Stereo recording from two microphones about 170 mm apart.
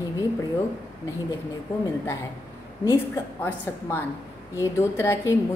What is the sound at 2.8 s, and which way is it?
A woman's voice, 15° left (ahead or behind).